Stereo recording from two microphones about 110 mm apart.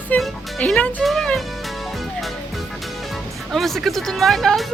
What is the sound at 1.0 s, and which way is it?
Music, centre (ahead or behind).